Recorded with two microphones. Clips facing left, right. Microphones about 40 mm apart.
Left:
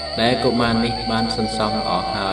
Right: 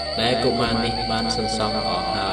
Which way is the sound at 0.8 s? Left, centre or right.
Centre.